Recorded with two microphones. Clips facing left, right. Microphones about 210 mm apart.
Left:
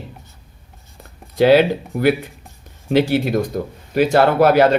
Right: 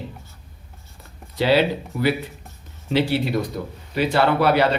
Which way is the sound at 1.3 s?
50° left (ahead or behind).